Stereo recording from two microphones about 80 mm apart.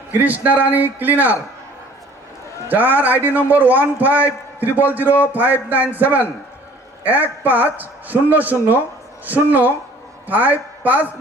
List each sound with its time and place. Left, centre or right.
0.1 s a man's voice: right
2.6 s a man's voice: right